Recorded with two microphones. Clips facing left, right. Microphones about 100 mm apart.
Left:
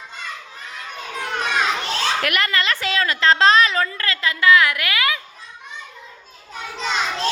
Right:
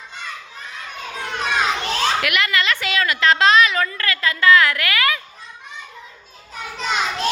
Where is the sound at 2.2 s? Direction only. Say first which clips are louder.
Right 1 dB; 40° left (ahead or behind); by 5.2 s 20° left (ahead or behind).